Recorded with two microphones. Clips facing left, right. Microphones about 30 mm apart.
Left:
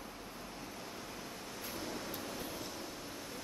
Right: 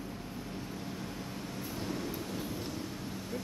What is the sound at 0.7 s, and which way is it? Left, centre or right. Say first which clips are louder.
Vehicle: right 5 dB; centre.